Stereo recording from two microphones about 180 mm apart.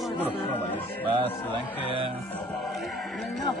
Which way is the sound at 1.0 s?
30° right (ahead or behind).